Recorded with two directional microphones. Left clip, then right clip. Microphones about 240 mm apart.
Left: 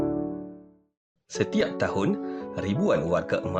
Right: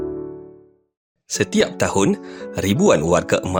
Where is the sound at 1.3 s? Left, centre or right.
Right.